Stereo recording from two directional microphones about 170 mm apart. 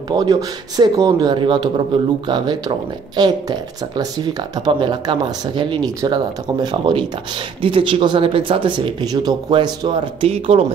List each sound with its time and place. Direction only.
0.1 s speech: 25° right (ahead or behind)